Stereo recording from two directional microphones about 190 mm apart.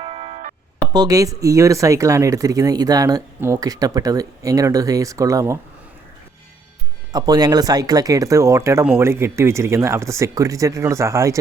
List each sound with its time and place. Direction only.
0.0 s music: 30° right (ahead or behind)
0.9 s speech: 20° right (ahead or behind)
7.1 s speech: 20° right (ahead or behind)